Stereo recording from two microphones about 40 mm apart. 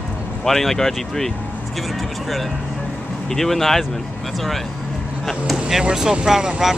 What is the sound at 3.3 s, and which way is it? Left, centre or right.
Speech, centre.